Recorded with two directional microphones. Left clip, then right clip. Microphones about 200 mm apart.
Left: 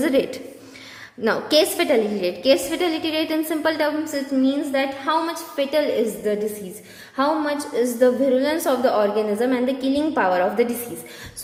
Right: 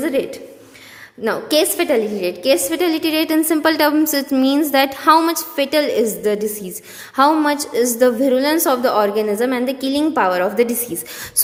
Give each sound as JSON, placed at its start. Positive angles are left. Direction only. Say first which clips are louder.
{"t": 0.0, "sound": "a woman's voice", "louder": "even", "side_deg": -10}